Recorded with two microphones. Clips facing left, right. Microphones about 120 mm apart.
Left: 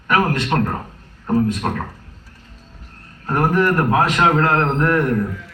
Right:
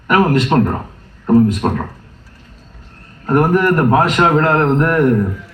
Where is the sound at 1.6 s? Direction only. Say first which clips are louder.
Right 5 dB; 15° right (ahead or behind).